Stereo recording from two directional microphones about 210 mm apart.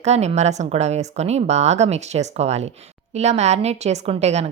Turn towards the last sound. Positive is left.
turn(degrees=-30)  # may be behind; listen again after turning